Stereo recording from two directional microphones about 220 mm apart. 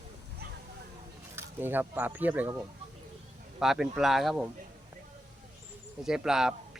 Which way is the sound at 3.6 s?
Centre (ahead or behind).